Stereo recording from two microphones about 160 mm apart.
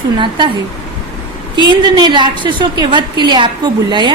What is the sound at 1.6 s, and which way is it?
A woman's voice, 30° right (ahead or behind).